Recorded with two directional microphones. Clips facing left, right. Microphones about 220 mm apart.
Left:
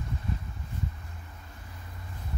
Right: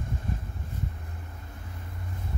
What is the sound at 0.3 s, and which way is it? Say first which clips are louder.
Boat: even; 50° right (ahead or behind).